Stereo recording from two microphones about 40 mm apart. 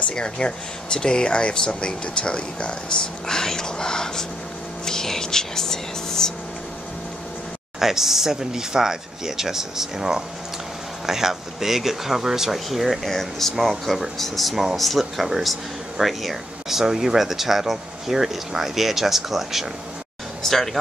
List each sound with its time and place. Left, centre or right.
0.1 s speech: left
7.8 s speech: centre
20.4 s speech: centre